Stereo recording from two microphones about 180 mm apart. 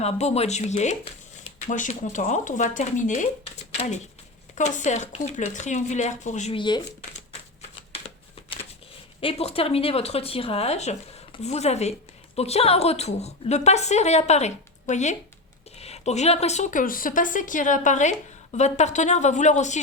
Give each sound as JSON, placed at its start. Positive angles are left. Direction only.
{"t": 0.0, "sound": "speech", "side_deg": 35}
{"t": 6.6, "sound": "speech", "side_deg": 25}
{"t": 9.2, "sound": "speech", "side_deg": 35}